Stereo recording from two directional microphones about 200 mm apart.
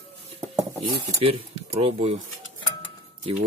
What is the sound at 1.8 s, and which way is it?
Speech, 30° right (ahead or behind).